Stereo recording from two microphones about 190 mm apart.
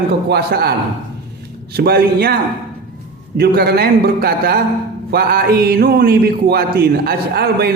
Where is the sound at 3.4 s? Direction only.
55° right (ahead or behind).